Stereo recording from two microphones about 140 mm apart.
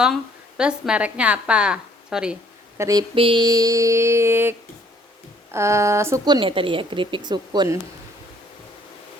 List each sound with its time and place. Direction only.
0.0 s a woman's voice: 5° right (ahead or behind)
2.7 s speech: 20° right (ahead or behind)
3.2 s mantra: 35° right (ahead or behind); by 4.5 s 15° right (ahead or behind)
5.5 s mantra: 20° right (ahead or behind)
6.2 s a woman's voice: 35° right (ahead or behind)